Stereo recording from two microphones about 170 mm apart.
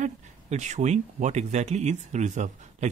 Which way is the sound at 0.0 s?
45° right (ahead or behind).